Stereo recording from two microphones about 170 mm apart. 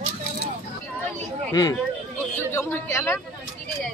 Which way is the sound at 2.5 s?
15° left (ahead or behind).